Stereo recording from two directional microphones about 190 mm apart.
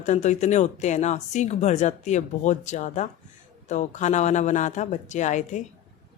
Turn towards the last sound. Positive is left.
turn(degrees=40)  # may be behind; listen again after turning